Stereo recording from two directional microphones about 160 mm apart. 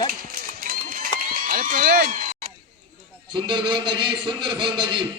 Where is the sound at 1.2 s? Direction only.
60° right (ahead or behind).